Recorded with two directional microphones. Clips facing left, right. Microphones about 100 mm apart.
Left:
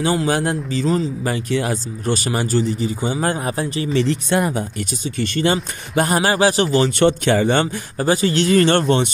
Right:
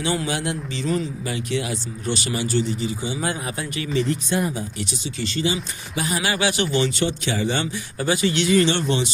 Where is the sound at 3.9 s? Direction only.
70° left (ahead or behind); by 6.2 s 50° left (ahead or behind).